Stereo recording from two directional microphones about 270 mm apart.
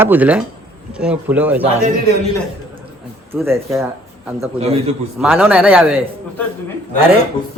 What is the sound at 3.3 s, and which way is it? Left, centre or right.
Speech, centre.